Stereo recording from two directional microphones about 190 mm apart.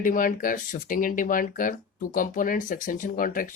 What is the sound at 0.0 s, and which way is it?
Speech, 45° left (ahead or behind).